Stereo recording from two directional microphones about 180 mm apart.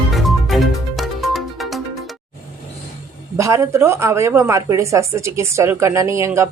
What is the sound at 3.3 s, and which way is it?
Speech, 15° right (ahead or behind).